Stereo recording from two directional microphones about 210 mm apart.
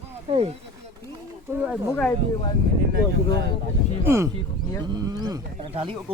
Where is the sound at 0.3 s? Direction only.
30° right (ahead or behind).